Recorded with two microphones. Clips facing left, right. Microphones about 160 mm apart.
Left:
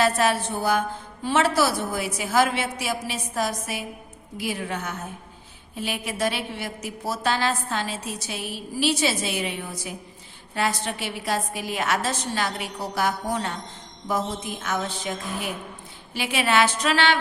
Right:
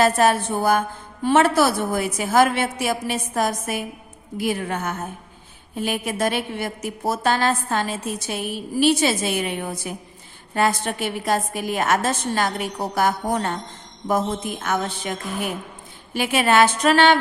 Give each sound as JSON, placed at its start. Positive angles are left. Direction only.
{"t": 0.0, "sound": "a woman's voice", "side_deg": -45}